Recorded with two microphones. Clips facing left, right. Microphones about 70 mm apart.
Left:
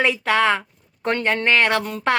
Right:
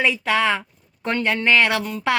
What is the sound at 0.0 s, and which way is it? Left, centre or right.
Speech, left.